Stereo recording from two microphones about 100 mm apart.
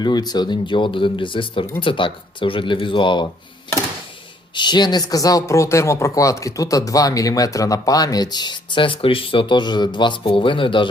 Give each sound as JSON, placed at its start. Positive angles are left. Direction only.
{"t": 0.0, "sound": "speech", "side_deg": 45}
{"t": 4.5, "sound": "speech", "side_deg": 50}